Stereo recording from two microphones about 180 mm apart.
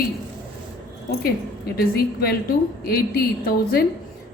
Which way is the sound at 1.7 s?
60° left (ahead or behind).